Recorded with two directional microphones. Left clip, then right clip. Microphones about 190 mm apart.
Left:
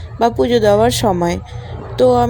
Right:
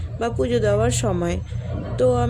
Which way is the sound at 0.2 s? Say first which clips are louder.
Left 8 dB; 25° left (ahead or behind).